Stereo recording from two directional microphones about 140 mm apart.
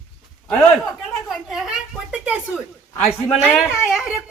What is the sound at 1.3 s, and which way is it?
A woman's voice, 5° right (ahead or behind).